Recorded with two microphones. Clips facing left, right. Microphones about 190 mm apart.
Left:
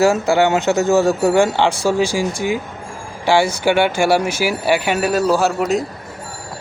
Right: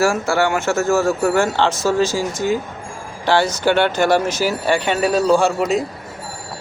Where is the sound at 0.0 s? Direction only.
20° left (ahead or behind); by 5.8 s centre (ahead or behind).